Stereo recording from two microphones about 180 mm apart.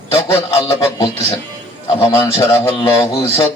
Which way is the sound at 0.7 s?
25° left (ahead or behind).